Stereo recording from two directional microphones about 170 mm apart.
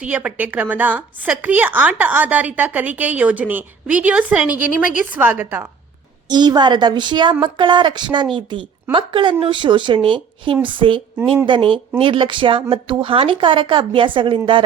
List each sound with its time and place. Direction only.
0.0 s a woman's voice: 5° right (ahead or behind)
6.2 s a woman's voice: 25° right (ahead or behind)